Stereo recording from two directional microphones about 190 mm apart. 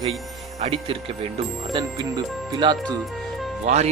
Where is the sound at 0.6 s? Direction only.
30° right (ahead or behind).